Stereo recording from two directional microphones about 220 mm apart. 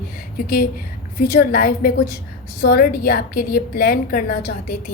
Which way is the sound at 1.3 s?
40° left (ahead or behind).